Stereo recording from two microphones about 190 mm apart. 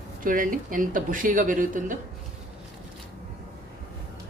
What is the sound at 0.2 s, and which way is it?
A man's voice, 45° right (ahead or behind).